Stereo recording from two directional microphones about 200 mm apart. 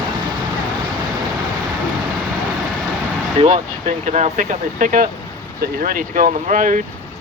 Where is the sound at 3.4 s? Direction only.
30° right (ahead or behind).